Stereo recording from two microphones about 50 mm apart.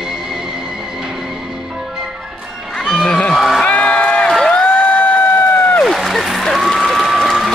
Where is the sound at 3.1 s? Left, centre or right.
Centre.